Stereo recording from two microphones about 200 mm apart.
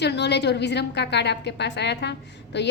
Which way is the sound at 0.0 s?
60° left (ahead or behind).